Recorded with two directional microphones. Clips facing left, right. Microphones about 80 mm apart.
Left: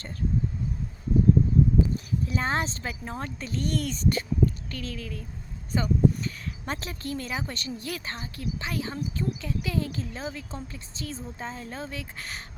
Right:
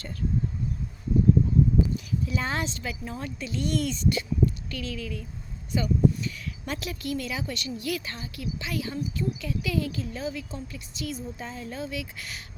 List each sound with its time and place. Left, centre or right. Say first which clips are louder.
2.2 s speech: left 3 dB; left